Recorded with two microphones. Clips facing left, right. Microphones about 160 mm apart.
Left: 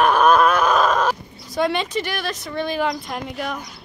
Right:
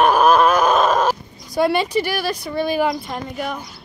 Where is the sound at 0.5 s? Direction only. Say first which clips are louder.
Right 2 dB; 30° right (ahead or behind).